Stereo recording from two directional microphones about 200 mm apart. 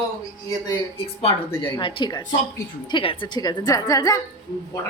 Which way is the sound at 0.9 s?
30° left (ahead or behind).